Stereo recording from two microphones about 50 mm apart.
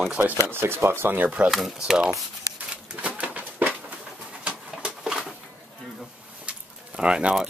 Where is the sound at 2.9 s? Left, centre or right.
Right.